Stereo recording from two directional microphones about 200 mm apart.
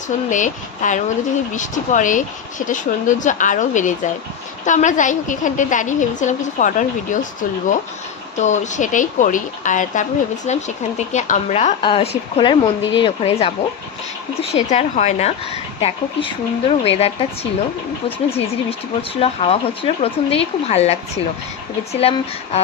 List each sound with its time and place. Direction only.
0.3 s a woman's voice: 40° left (ahead or behind)
8.4 s a woman's voice: 35° left (ahead or behind)
14.5 s a woman's voice: 35° left (ahead or behind)
18.3 s a woman's voice: 30° left (ahead or behind)